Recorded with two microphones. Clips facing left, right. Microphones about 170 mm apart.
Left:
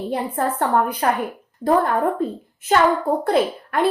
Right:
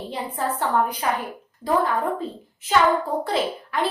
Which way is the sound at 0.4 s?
50° left (ahead or behind).